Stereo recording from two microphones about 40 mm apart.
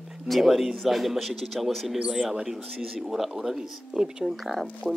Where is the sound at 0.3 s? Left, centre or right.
Centre.